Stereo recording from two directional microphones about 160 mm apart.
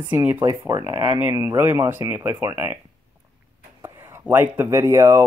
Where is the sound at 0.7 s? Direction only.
20° right (ahead or behind).